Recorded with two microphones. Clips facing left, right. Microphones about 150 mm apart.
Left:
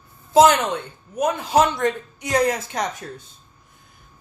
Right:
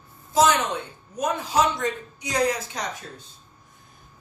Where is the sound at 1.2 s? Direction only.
60° left (ahead or behind).